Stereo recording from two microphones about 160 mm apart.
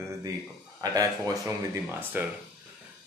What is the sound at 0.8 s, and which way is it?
Speech, 20° right (ahead or behind).